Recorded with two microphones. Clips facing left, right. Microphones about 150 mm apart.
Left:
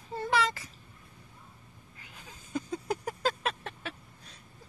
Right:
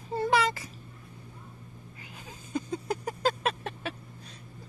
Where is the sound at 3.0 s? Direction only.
10° right (ahead or behind).